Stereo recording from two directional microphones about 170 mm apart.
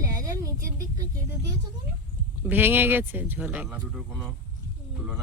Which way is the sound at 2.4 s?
10° right (ahead or behind).